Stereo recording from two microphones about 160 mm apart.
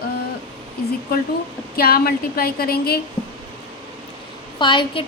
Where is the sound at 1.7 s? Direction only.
70° left (ahead or behind).